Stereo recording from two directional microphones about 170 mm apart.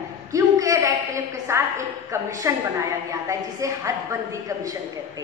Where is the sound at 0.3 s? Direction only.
20° right (ahead or behind).